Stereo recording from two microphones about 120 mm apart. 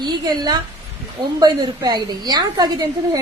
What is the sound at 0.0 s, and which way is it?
A woman's voice, 35° right (ahead or behind).